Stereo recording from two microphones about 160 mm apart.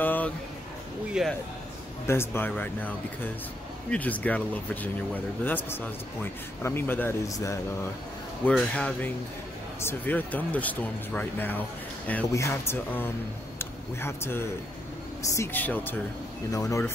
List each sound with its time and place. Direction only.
0.0 s a sound: 10° left (ahead or behind)
1.2 s speech: 5° right (ahead or behind)
2.0 s speech: 15° left (ahead or behind)
3.9 s speech: 10° left (ahead or behind)
8.5 s speech: 5° left (ahead or behind)